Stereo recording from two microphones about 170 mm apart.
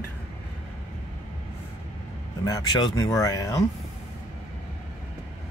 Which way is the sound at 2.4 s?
20° left (ahead or behind).